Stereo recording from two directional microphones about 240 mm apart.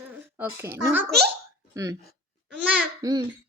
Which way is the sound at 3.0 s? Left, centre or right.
Centre.